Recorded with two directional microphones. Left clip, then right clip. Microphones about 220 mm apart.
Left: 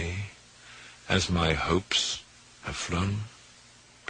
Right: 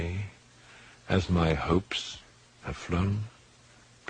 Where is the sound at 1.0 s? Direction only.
20° left (ahead or behind).